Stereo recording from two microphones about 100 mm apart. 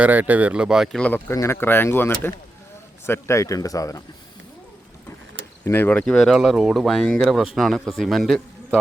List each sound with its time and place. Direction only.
0.0 s speech: 15° right (ahead or behind)
0.9 s speech: 15° left (ahead or behind)
1.3 s speech: 25° left (ahead or behind)
5.6 s speech: 20° left (ahead or behind)
6.1 s speech: centre (ahead or behind)